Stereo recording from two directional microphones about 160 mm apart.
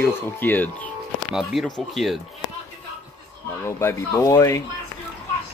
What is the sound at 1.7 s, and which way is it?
Speech, centre (ahead or behind).